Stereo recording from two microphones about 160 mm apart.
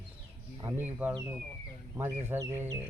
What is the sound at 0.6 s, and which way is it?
Speech, 15° right (ahead or behind).